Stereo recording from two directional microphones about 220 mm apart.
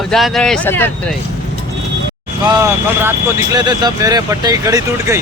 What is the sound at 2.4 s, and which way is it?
Speech, 15° right (ahead or behind).